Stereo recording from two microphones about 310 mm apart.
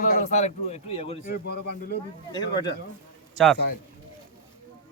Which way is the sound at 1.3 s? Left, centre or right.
Left.